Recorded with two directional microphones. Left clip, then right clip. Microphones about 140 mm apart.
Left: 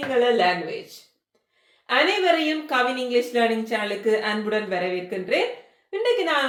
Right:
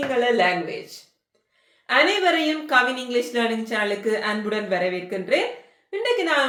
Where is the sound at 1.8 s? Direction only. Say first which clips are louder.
Right 1 dB; 30° right (ahead or behind).